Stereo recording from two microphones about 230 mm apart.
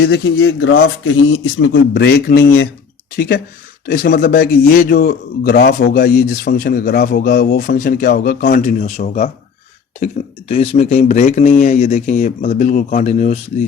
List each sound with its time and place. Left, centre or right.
0.0 s a man's voice: left